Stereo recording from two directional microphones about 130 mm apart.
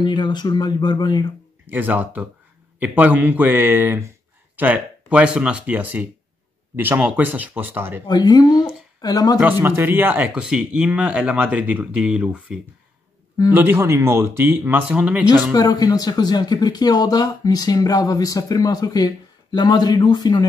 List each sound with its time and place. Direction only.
0.0 s speech: 35° left (ahead or behind)
1.7 s speech: 15° right (ahead or behind)
8.1 s speech: 30° left (ahead or behind)
9.5 s speech: 15° right (ahead or behind)
15.5 s speech: 30° left (ahead or behind)